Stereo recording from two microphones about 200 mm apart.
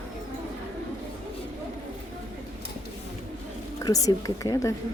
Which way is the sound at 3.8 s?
15° left (ahead or behind).